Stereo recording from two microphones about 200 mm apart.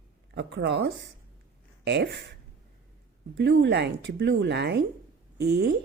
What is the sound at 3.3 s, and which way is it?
A woman's voice, 60° right (ahead or behind).